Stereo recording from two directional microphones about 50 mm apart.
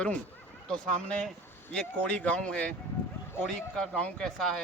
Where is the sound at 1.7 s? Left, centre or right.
Left.